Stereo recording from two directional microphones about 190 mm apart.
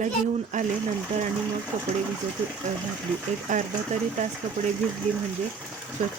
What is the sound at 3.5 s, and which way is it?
Speech, 40° right (ahead or behind).